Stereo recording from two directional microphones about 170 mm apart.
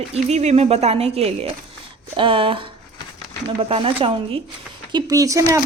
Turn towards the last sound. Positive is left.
turn(degrees=-20)  # may be behind; listen again after turning